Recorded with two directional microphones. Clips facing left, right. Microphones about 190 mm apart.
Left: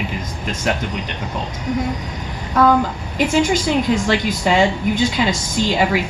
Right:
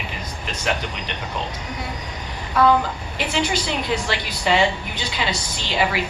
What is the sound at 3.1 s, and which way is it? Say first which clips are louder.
A woman's voice: left 7 dB; 45° left (ahead or behind).